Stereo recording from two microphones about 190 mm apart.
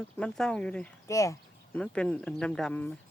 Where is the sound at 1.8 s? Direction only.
5° left (ahead or behind).